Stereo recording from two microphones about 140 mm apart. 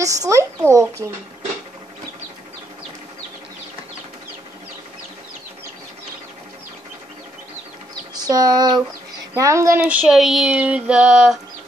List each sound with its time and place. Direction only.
0.0 s a child's voice: 25° right (ahead or behind)
8.1 s a child's voice: 30° right (ahead or behind)
9.8 s a sound: 5° right (ahead or behind)